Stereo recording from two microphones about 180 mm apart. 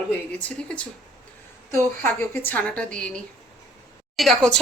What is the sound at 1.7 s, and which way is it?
Speech, 15° left (ahead or behind).